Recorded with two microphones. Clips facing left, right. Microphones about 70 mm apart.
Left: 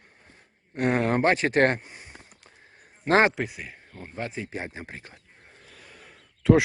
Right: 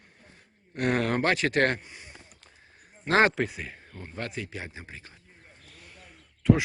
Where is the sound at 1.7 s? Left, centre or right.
Left.